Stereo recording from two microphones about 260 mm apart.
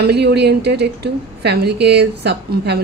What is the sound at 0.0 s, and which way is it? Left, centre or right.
Speech, right.